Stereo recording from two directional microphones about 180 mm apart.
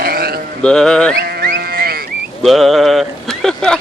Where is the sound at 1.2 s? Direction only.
60° right (ahead or behind).